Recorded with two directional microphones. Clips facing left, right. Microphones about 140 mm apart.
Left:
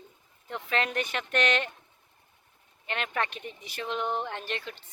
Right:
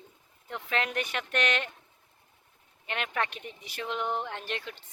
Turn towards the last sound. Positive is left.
turn(degrees=-10)  # may be behind; listen again after turning